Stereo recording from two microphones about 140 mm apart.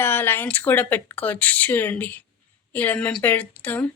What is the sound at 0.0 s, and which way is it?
Speech, 15° left (ahead or behind).